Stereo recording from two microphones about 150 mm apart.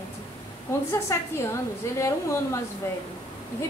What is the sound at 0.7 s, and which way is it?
Speech, 20° left (ahead or behind).